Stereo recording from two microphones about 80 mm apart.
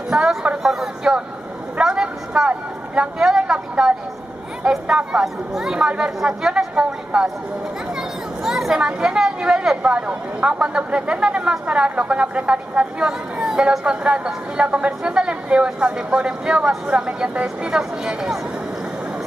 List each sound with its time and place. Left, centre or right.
0.1 s speech: centre
1.8 s a sound: centre
4.6 s speech: centre
8.5 s speech: centre